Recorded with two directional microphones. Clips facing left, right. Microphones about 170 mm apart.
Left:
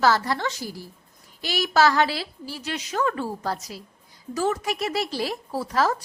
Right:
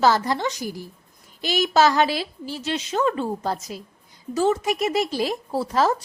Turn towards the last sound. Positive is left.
turn(degrees=-25)  # may be behind; listen again after turning